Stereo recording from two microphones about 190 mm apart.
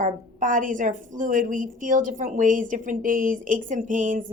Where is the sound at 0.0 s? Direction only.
45° right (ahead or behind).